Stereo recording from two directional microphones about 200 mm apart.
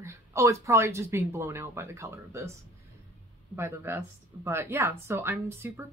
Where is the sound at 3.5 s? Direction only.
10° right (ahead or behind).